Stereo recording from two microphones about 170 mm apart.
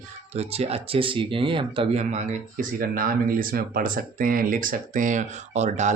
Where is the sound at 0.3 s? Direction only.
35° right (ahead or behind).